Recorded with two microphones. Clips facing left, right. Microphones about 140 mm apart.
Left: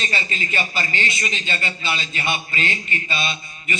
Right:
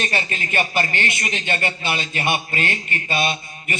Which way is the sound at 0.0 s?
55° right (ahead or behind).